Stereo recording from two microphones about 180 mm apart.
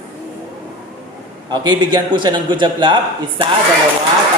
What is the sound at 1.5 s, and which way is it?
A man's voice, 25° right (ahead or behind).